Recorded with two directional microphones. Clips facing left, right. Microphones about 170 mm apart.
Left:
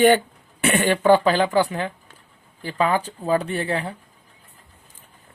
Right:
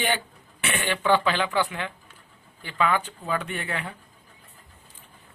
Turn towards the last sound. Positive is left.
turn(degrees=35)  # may be behind; listen again after turning